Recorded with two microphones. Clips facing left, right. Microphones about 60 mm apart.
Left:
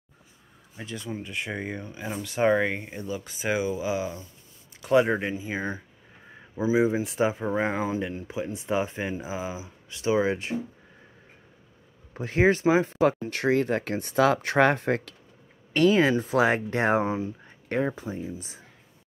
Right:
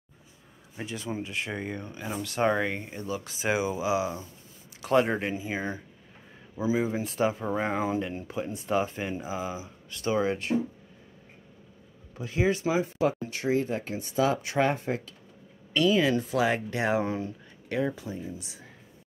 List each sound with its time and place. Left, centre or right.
0.9 s speech: centre
3.1 s speech: centre
6.5 s speech: centre
12.1 s speech: left
12.8 s speech: left
15.7 s speech: left
17.0 s speech: centre
17.6 s speech: left